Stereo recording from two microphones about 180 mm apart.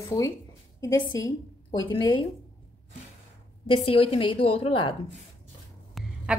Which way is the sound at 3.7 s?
30° left (ahead or behind).